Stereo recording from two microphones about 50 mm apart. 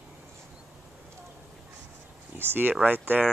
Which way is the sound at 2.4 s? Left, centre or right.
Right.